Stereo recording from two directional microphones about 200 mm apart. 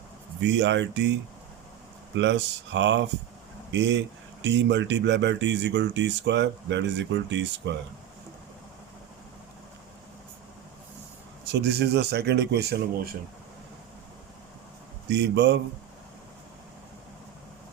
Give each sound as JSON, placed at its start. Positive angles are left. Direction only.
{"t": 0.4, "sound": "speech", "side_deg": -60}
{"t": 2.1, "sound": "speech", "side_deg": -65}
{"t": 11.5, "sound": "speech", "side_deg": -55}
{"t": 15.1, "sound": "speech", "side_deg": -55}